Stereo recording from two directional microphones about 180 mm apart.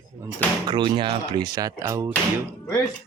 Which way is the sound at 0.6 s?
25° right (ahead or behind).